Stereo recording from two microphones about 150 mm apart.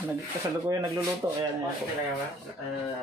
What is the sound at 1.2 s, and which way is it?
Speech, 20° right (ahead or behind).